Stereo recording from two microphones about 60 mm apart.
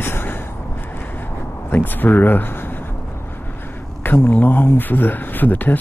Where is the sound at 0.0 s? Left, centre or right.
Left.